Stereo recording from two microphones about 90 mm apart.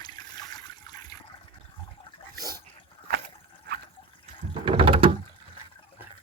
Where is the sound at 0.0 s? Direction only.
50° left (ahead or behind).